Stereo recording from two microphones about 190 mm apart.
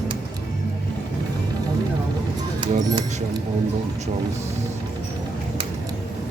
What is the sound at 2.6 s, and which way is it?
Speech, 25° right (ahead or behind).